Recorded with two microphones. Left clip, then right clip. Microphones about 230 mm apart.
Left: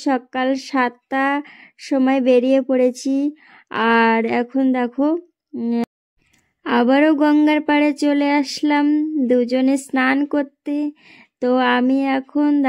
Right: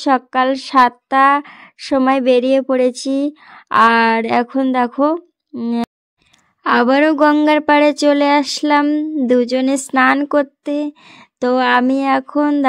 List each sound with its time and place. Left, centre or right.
0.0 s speech: centre